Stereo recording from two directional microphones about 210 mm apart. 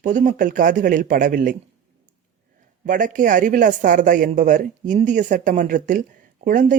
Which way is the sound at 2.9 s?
40° right (ahead or behind).